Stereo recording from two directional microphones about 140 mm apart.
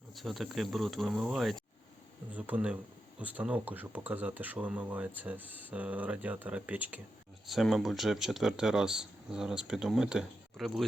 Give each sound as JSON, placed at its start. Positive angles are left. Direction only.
{"t": 0.2, "sound": "speech", "side_deg": 0}
{"t": 7.4, "sound": "speech", "side_deg": 0}